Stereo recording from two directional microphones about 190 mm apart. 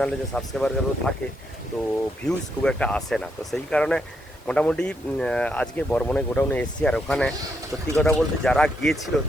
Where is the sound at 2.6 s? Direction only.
5° left (ahead or behind).